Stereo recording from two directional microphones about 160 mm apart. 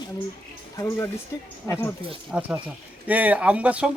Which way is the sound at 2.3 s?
5° right (ahead or behind).